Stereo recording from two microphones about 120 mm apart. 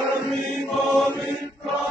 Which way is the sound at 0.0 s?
Centre (ahead or behind).